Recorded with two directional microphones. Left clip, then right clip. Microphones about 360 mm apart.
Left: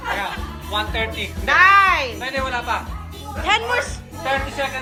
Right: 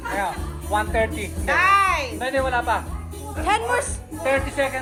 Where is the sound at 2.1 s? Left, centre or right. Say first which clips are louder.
Right 2 dB; centre.